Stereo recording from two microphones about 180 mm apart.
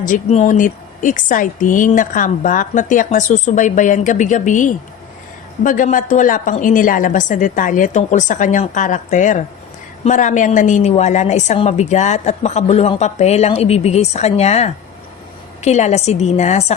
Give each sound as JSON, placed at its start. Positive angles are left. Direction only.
{"t": 0.0, "sound": "a woman's voice", "side_deg": 40}